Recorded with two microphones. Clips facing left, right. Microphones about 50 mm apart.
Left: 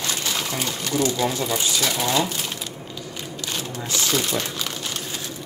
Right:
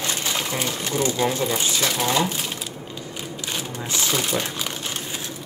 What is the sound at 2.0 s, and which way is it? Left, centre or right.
Speech, right.